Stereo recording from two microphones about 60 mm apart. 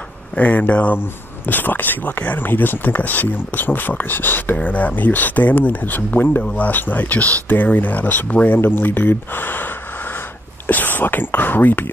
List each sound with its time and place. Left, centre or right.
0.4 s speech: left
4.6 s speech: left
6.4 s speech: left
10.7 s speech: left